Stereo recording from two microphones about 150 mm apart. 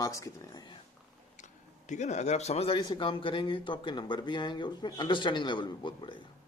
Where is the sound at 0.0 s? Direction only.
20° left (ahead or behind).